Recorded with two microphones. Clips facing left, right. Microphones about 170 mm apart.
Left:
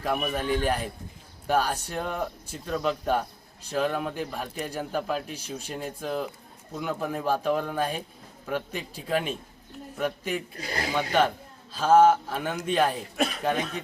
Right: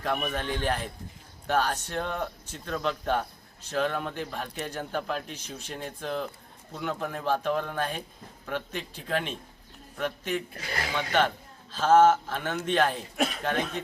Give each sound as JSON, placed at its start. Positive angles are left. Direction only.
{"t": 0.0, "sound": "speech", "side_deg": 5}
{"t": 10.6, "sound": "speech", "side_deg": 35}
{"t": 10.9, "sound": "speech", "side_deg": 10}